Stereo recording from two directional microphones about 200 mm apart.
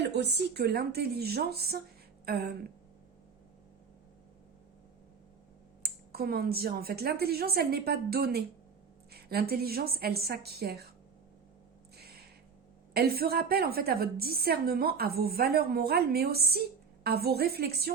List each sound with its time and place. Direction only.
0.0 s a woman's voice: 60° right (ahead or behind)
5.8 s a woman's voice: 50° right (ahead or behind)
11.9 s a sound: 50° right (ahead or behind)
12.9 s a woman's voice: 50° right (ahead or behind)